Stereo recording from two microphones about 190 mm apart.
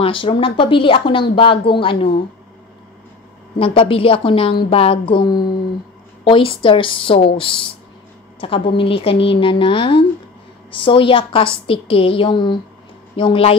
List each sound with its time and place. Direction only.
0.0 s speech: 25° left (ahead or behind)
3.5 s speech: 30° left (ahead or behind)